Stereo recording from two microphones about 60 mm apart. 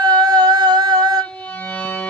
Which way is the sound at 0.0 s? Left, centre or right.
Right.